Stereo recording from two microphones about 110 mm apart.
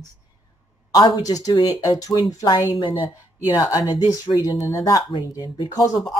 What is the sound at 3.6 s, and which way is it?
Speech, 30° left (ahead or behind).